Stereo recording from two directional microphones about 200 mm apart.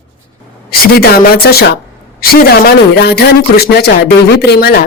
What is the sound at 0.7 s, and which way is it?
Speech, 50° left (ahead or behind).